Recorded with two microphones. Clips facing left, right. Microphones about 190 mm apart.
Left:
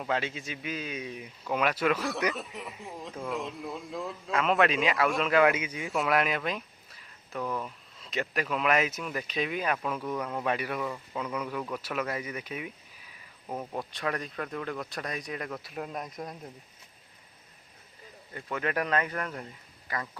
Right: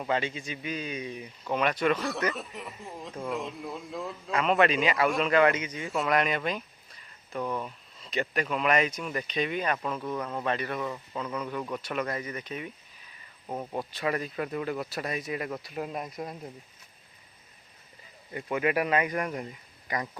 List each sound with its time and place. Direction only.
0.0 s speech: centre (ahead or behind)
13.5 s speech: 5° right (ahead or behind)
18.3 s speech: 15° right (ahead or behind)